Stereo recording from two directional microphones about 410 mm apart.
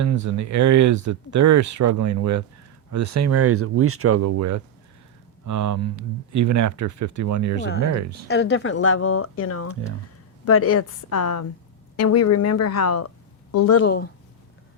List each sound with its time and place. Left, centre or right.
0.0 s speech: right
8.3 s a woman's voice: left